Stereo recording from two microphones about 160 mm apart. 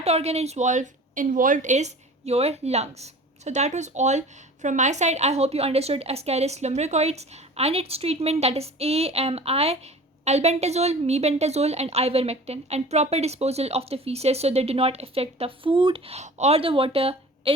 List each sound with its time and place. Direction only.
0.0 s a woman's voice: 40° right (ahead or behind)